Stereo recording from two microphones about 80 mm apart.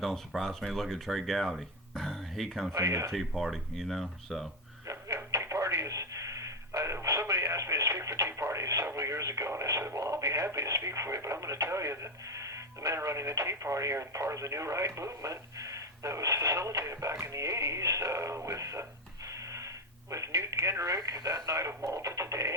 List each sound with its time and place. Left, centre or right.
0.0 s speech: centre
2.7 s speech: right
3.1 s speech: centre
4.9 s telephone: right
19.5 s speech: right